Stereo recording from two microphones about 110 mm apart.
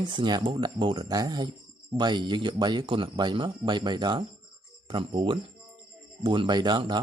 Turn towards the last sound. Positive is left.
turn(degrees=-45)  # may be behind; listen again after turning